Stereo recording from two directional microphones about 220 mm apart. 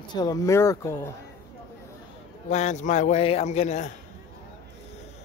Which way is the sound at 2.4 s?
30° left (ahead or behind).